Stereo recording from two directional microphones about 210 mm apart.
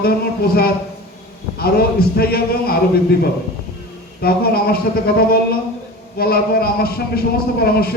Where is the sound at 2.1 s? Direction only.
45° left (ahead or behind).